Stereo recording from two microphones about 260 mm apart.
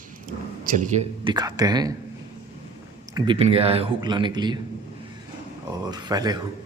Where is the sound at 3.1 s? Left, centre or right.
Centre.